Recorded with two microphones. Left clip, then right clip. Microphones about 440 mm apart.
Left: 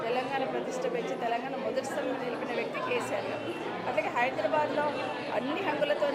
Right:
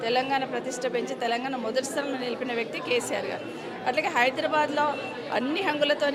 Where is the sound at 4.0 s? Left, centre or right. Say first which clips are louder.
Right 4 dB; right.